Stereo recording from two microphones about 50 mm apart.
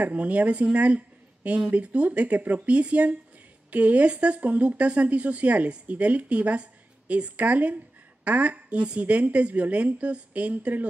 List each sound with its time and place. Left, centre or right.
0.0 s speech: right